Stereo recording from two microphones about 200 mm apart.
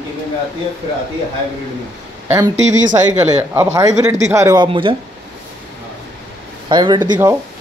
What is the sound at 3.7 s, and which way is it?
Speech, 15° right (ahead or behind).